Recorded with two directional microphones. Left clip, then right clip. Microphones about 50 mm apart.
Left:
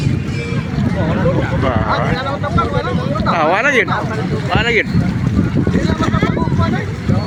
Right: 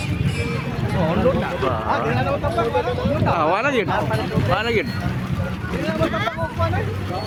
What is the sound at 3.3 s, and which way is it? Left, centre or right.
Speech, left.